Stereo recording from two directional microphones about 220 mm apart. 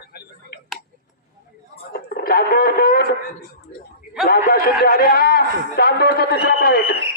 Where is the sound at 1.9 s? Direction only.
45° left (ahead or behind).